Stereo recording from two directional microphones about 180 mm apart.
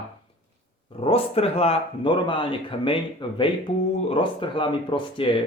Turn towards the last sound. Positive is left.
turn(degrees=30)  # may be behind; listen again after turning